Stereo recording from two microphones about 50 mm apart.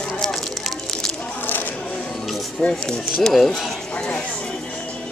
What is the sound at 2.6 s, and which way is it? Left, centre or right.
Speech, centre.